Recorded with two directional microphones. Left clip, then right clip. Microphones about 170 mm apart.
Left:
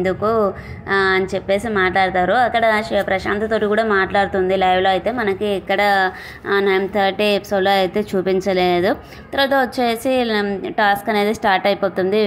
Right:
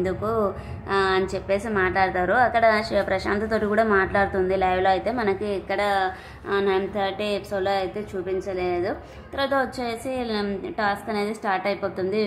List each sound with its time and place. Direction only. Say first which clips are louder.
0.0 s a woman's voice: left 7 dB; 25° left (ahead or behind)